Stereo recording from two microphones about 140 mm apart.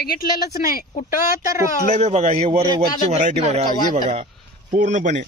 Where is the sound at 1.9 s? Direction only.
50° right (ahead or behind).